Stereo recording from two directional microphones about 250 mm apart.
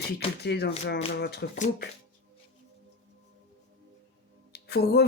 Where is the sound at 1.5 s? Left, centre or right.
Left.